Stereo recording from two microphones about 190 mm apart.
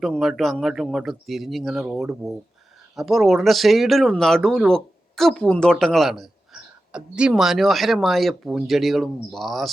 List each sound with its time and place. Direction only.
0.0 s speech: centre (ahead or behind)